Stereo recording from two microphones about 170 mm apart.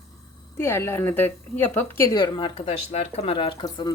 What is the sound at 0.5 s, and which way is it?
A woman's voice, 15° left (ahead or behind).